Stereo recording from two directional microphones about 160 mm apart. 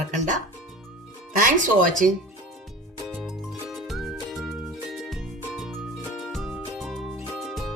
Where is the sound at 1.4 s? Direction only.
55° right (ahead or behind).